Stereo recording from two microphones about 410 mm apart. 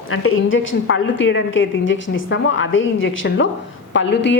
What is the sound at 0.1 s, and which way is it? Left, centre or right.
A woman's voice, left.